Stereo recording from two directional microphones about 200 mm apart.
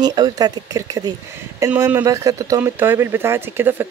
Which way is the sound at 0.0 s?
20° right (ahead or behind).